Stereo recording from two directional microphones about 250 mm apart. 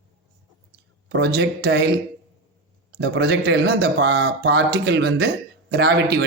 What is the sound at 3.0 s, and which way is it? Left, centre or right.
A man's voice, right.